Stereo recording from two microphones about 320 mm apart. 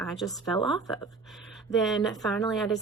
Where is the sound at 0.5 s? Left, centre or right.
Centre.